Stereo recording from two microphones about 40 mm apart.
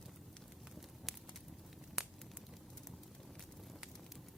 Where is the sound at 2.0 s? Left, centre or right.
Centre.